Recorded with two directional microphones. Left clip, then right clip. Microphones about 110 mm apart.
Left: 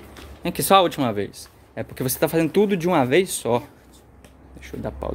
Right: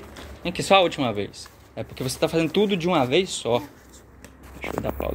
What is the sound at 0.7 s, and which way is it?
Speech, 90° left.